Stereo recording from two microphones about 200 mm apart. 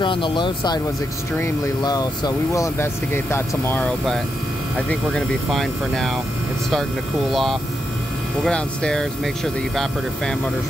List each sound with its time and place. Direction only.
0.0 s speech: 25° left (ahead or behind); by 6.1 s centre (ahead or behind)
8.5 s speech: 5° left (ahead or behind)